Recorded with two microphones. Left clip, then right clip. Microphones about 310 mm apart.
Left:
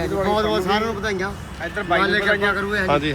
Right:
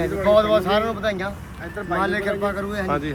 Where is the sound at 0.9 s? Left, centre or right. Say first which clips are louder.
Even; right.